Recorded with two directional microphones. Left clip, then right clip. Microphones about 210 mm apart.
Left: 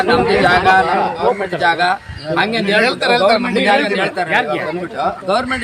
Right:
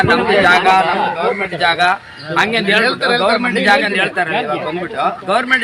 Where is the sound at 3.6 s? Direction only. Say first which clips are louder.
Right 3 dB; centre (ahead or behind).